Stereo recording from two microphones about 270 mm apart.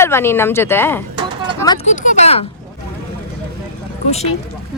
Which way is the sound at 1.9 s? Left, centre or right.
Left.